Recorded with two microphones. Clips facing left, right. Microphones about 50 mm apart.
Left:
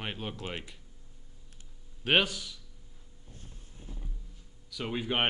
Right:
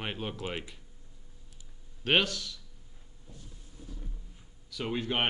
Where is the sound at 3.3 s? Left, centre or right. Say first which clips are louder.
Right 1 dB; left.